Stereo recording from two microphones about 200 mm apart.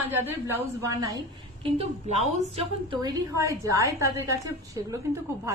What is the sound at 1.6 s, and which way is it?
A woman's voice, 30° right (ahead or behind).